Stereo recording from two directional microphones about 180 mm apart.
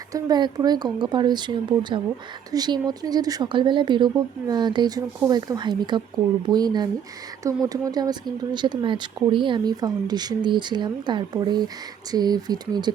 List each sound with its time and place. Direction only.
0.1 s speech: 25° right (ahead or behind)